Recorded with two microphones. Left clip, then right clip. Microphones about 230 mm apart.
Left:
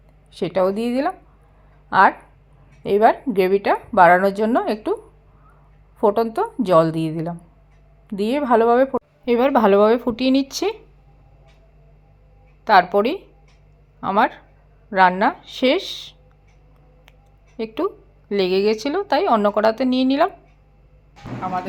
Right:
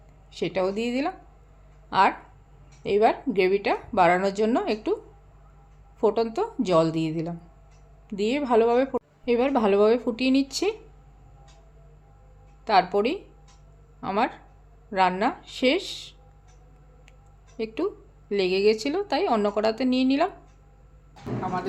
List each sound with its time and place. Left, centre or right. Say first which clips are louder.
0.3 s speech: left 7 dB; centre
6.0 s speech: left 5 dB; centre
12.6 s speech: left 7 dB; centre
17.6 s speech: left 5 dB; centre